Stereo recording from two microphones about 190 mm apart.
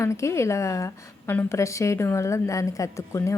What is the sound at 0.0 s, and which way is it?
A woman's voice, 15° left (ahead or behind).